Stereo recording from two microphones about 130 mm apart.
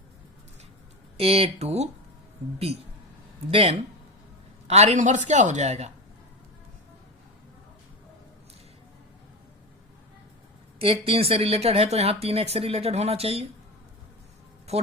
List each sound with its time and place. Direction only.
1.1 s speech: 45° right (ahead or behind)
3.5 s a woman's voice: 50° right (ahead or behind)
10.8 s speech: 45° right (ahead or behind)
14.7 s a man's voice: 55° right (ahead or behind)